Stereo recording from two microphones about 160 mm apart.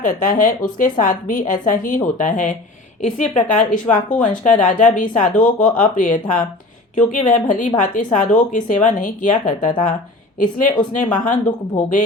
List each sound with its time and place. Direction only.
0.0 s speech: 55° left (ahead or behind)